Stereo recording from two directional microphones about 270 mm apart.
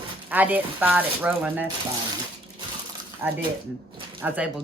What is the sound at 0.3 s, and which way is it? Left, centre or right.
Speech, centre.